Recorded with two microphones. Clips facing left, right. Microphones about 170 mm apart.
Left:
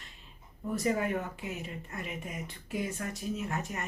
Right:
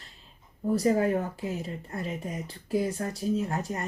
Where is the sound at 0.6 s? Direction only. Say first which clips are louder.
Right 6 dB; 35° right (ahead or behind).